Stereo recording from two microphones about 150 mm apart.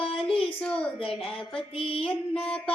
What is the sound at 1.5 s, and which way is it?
Music, 40° left (ahead or behind).